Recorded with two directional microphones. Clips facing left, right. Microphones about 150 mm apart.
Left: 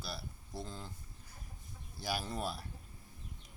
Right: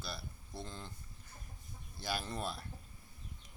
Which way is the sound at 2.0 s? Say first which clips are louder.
Left 1 dB; 10° left (ahead or behind).